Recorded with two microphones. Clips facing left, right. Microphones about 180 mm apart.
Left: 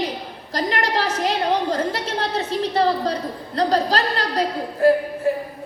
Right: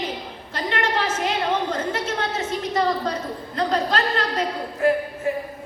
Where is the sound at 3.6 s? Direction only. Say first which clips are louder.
Left 3 dB; 35° left (ahead or behind).